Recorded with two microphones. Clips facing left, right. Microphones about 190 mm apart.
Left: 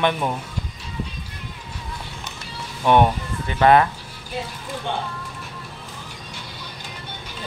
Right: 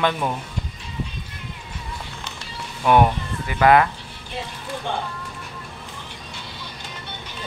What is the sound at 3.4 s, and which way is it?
Speech, 25° left (ahead or behind).